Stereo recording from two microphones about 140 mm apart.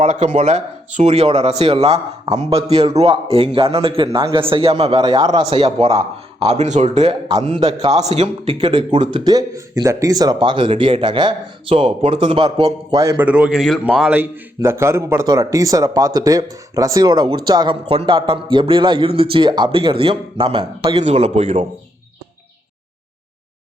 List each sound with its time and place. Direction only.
0.0 s speech: 55° right (ahead or behind)
4.9 s a man's voice: 25° right (ahead or behind)
5.5 s a man's voice: 45° right (ahead or behind); by 13.2 s 20° right (ahead or behind)
13.2 s a man's voice: 10° right (ahead or behind); by 21.7 s 45° right (ahead or behind)